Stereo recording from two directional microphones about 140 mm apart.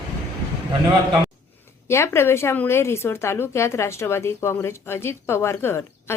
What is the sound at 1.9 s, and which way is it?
A woman's voice, 20° left (ahead or behind).